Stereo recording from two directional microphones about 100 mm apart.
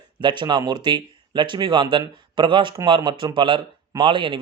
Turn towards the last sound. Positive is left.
turn(degrees=-55)  # may be behind; listen again after turning